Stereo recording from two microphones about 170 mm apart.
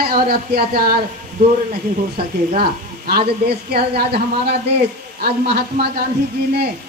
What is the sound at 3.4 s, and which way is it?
Speech, 70° right (ahead or behind).